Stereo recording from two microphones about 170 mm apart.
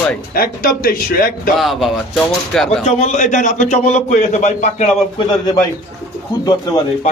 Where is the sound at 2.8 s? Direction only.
45° left (ahead or behind).